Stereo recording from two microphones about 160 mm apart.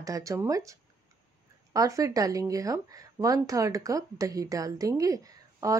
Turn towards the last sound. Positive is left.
turn(degrees=-20)  # may be behind; listen again after turning